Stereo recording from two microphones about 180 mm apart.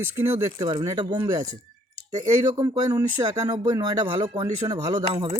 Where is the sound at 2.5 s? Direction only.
20° right (ahead or behind).